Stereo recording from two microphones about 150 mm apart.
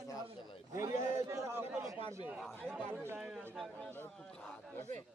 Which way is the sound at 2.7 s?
10° right (ahead or behind).